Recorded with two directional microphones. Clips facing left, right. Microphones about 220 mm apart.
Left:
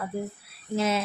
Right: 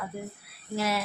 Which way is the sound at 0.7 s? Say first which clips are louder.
Left 3 dB; 20° left (ahead or behind).